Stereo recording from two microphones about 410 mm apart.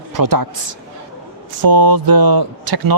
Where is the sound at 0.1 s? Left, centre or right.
Right.